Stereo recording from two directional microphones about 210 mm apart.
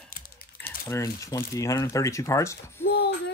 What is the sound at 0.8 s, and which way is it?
Speech, 15° left (ahead or behind).